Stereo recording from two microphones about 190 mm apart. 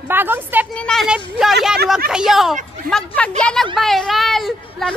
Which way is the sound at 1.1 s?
5° right (ahead or behind).